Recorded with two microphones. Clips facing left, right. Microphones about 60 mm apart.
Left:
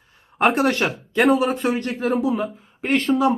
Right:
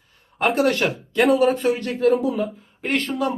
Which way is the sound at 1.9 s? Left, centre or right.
Centre.